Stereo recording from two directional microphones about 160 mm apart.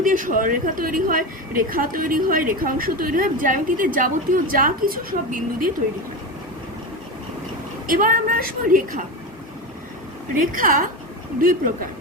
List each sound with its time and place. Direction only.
0.0 s a woman's voice: 55° right (ahead or behind)
7.9 s a woman's voice: 60° right (ahead or behind)
10.4 s a woman's voice: 60° right (ahead or behind)